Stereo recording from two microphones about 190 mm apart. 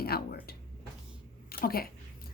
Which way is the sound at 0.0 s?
55° left (ahead or behind).